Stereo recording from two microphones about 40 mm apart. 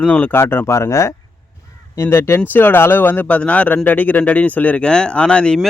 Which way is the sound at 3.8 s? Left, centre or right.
Left.